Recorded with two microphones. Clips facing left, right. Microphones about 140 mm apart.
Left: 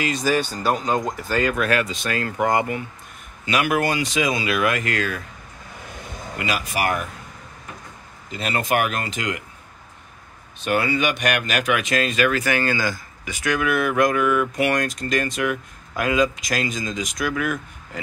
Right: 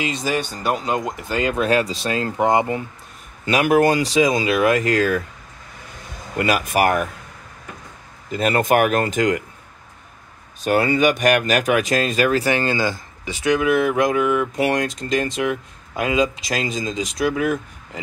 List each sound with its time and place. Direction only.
0.0 s speech: 25° right (ahead or behind)
3.4 s speech: 40° right (ahead or behind)
6.3 s speech: 50° right (ahead or behind)
8.3 s speech: 45° right (ahead or behind)
10.6 s speech: 40° right (ahead or behind)